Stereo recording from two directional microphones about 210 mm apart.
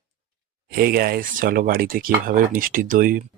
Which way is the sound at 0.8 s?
45° right (ahead or behind).